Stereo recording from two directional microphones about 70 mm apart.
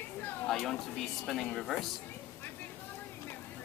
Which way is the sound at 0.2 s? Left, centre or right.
Left.